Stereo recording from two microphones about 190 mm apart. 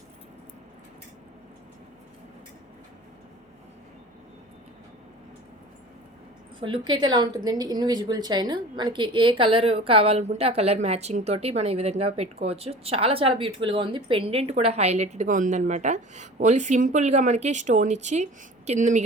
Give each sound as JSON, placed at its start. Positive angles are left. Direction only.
{"t": 6.6, "sound": "speech", "side_deg": -25}